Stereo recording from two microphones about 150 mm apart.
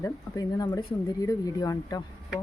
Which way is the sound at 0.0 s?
20° left (ahead or behind).